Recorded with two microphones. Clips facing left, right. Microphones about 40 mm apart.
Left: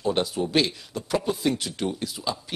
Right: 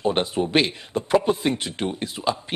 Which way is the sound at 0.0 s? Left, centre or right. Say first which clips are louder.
Right 3 dB; right.